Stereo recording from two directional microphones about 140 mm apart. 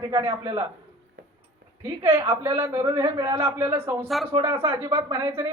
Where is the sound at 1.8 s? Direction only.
15° right (ahead or behind).